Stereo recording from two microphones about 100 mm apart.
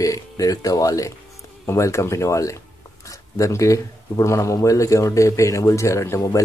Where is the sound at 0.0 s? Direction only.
35° left (ahead or behind).